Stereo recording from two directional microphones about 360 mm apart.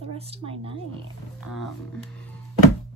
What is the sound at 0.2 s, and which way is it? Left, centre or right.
Speech, centre.